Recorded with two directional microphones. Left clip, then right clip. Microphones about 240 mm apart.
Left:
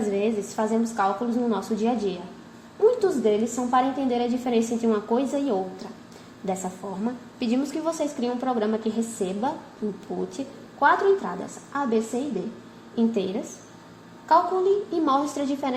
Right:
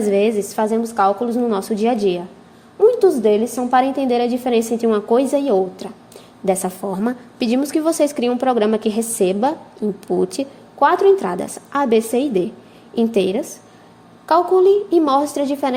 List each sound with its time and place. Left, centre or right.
0.1 s a woman's voice: right